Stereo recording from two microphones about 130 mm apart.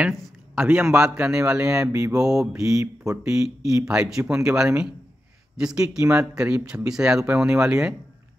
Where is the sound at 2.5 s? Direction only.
25° right (ahead or behind).